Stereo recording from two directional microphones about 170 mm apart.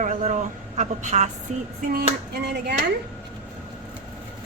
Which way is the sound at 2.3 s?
75° right (ahead or behind).